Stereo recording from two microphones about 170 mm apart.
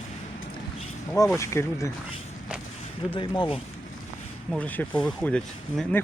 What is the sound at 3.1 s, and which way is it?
Speech, 30° left (ahead or behind).